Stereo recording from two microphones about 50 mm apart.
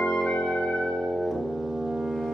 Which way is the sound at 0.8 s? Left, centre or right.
Centre.